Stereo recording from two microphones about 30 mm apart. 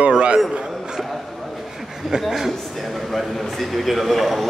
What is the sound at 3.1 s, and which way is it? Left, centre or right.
A man's voice, centre.